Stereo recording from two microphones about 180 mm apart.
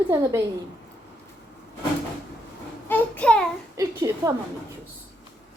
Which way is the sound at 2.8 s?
10° left (ahead or behind).